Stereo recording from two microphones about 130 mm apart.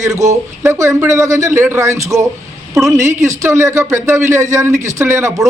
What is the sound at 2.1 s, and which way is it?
Speech, centre (ahead or behind).